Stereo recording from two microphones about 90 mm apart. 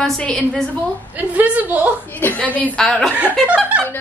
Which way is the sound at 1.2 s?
15° right (ahead or behind).